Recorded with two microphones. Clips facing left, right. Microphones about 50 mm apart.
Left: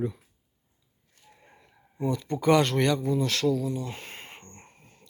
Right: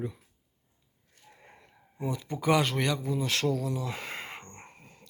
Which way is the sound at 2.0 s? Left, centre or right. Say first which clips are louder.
Left 5 dB; centre.